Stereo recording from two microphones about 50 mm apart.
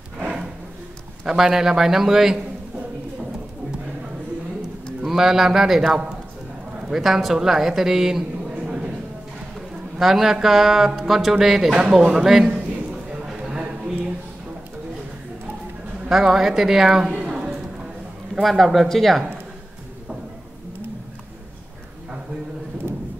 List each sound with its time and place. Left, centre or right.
1.2 s speech: centre
5.0 s a man's voice: centre
9.9 s speech: centre
12.4 s a sound: right
16.1 s speech: centre
17.3 s a sound: centre
18.3 s speech: centre